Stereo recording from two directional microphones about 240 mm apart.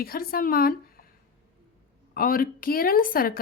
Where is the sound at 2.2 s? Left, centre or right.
Left.